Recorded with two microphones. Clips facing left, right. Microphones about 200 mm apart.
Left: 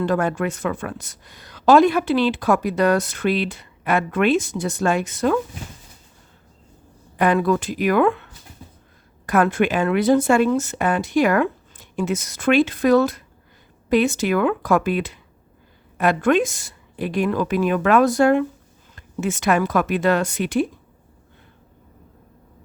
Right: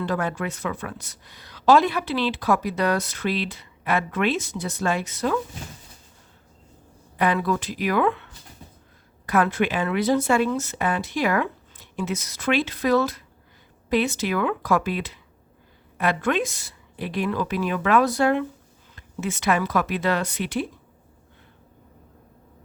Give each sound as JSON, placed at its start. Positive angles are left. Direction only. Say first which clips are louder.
{"t": 0.0, "sound": "speech", "louder": "left 5 dB", "side_deg": 50}
{"t": 7.2, "sound": "speech", "louder": "left 5 dB", "side_deg": 45}